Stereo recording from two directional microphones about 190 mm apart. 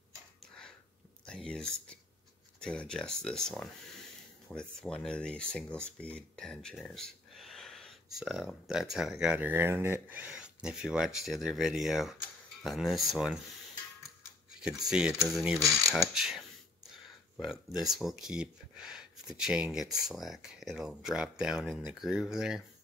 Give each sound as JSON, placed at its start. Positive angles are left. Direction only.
{"t": 0.4, "sound": "a sound", "side_deg": 5}
{"t": 1.2, "sound": "speech", "side_deg": 5}
{"t": 14.5, "sound": "speech", "side_deg": -5}
{"t": 17.8, "sound": "speech", "side_deg": 0}